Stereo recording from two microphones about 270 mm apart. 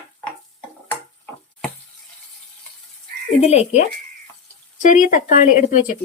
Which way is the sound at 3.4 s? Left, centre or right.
Left.